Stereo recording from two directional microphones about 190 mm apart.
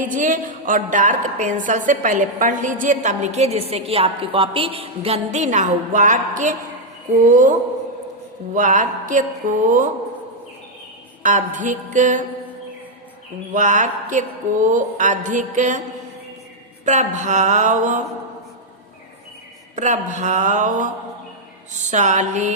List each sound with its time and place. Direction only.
0.0 s a woman's voice: 45° right (ahead or behind)
8.5 s speech: 45° right (ahead or behind)
11.2 s a woman's voice: 40° right (ahead or behind)
13.5 s a woman's voice: 40° right (ahead or behind)
16.8 s a woman's voice: 40° right (ahead or behind)
19.7 s a woman's voice: 40° right (ahead or behind)